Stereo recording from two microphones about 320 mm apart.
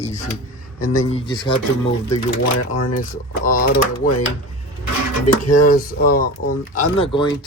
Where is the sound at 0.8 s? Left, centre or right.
Left.